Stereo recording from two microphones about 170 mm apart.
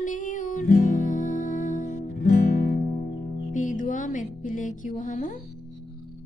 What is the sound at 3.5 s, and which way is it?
Music, 50° left (ahead or behind).